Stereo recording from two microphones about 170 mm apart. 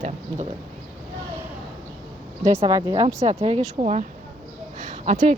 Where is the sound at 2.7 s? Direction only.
20° right (ahead or behind).